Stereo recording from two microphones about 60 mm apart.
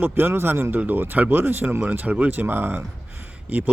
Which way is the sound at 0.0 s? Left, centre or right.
Right.